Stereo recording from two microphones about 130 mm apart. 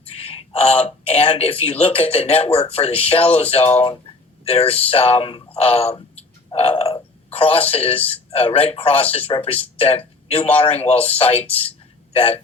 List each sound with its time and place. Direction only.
0.0 s speech: 50° left (ahead or behind)